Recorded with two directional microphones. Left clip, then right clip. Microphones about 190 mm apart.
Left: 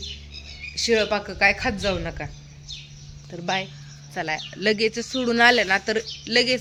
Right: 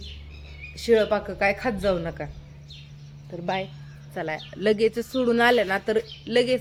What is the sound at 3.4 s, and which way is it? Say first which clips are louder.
A woman's voice: left 2 dB; centre (ahead or behind).